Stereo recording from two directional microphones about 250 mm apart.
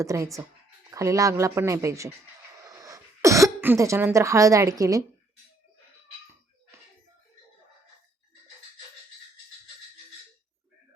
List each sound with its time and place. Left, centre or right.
0.0 s speech: centre
2.6 s throat clearing: centre
4.8 s speech: centre